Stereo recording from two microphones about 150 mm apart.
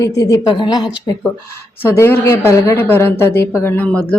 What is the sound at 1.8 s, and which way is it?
Speech, 15° left (ahead or behind).